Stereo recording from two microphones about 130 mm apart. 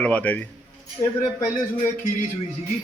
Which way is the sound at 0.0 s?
10° left (ahead or behind).